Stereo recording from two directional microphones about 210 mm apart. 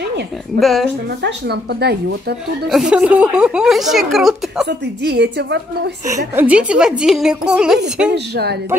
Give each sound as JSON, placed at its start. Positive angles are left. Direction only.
{"t": 0.6, "sound": "a woman's voice", "side_deg": 0}
{"t": 1.2, "sound": "speech", "side_deg": -50}
{"t": 2.7, "sound": "a woman's voice", "side_deg": -5}
{"t": 4.6, "sound": "speech", "side_deg": -50}
{"t": 6.3, "sound": "a woman's voice", "side_deg": -5}
{"t": 8.1, "sound": "speech", "side_deg": -50}